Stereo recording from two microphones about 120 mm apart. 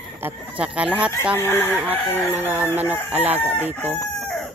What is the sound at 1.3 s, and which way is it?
Speech, 20° left (ahead or behind).